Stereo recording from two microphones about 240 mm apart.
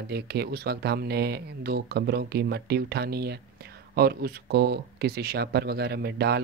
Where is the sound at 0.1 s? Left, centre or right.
Right.